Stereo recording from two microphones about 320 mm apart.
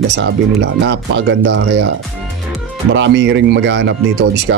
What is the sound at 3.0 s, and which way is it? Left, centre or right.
A man's voice, right.